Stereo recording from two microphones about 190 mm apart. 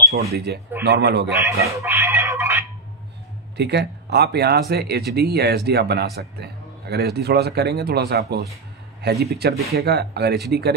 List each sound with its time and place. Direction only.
0.1 s speech: 55° right (ahead or behind)
1.8 s a sound: 15° right (ahead or behind)
3.5 s speech: 60° right (ahead or behind)